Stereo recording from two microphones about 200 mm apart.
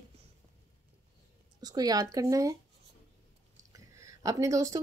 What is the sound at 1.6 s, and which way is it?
Speech, 20° right (ahead or behind).